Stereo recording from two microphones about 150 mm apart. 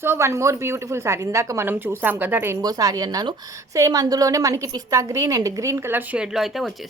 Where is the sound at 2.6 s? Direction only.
25° right (ahead or behind).